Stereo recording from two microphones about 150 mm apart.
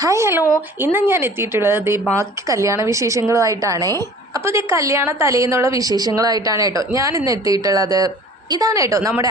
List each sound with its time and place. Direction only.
0.0 s a woman's voice: 20° right (ahead or behind)